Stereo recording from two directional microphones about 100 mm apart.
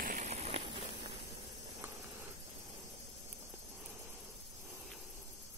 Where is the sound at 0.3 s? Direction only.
90° right.